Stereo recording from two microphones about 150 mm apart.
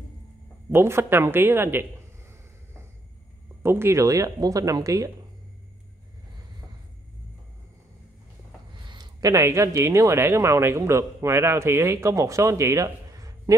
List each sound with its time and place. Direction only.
0.7 s speech: 15° right (ahead or behind)
3.6 s speech: 15° right (ahead or behind)
8.8 s speech: 30° right (ahead or behind)